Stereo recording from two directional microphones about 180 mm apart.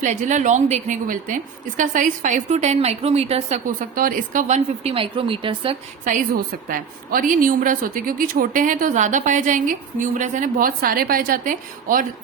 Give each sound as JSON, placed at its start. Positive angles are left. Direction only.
{"t": 0.0, "sound": "a woman's voice", "side_deg": -40}
{"t": 6.1, "sound": "a woman's voice", "side_deg": -50}